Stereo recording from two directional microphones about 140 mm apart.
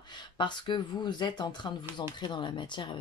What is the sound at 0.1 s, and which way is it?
Speech, 35° left (ahead or behind).